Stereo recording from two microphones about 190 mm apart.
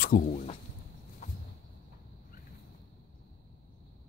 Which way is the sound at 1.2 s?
40° left (ahead or behind).